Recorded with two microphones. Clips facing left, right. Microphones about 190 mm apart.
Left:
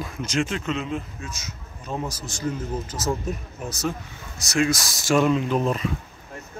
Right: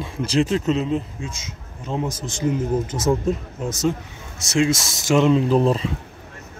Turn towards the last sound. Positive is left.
turn(degrees=-30)  # may be behind; listen again after turning